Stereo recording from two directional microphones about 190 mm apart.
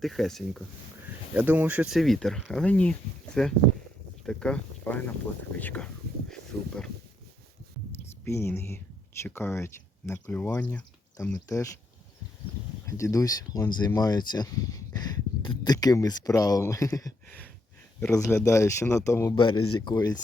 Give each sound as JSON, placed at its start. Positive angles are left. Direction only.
{"t": 0.0, "sound": "speech", "side_deg": 0}
{"t": 7.9, "sound": "speech", "side_deg": 10}
{"t": 12.8, "sound": "speech", "side_deg": 15}
{"t": 19.4, "sound": "speech", "side_deg": 25}